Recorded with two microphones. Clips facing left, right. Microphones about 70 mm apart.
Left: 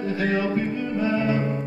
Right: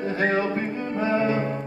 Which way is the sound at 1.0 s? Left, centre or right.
Right.